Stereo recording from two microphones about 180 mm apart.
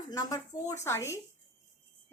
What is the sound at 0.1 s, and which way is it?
A woman's voice, 20° left (ahead or behind).